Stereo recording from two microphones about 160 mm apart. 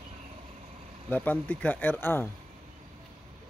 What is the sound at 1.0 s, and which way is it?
Speech, 10° left (ahead or behind).